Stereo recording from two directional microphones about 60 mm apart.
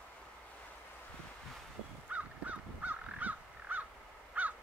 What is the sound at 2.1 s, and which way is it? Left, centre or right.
Crow, right.